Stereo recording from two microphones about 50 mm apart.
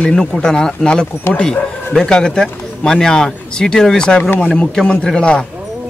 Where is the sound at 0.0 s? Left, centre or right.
Centre.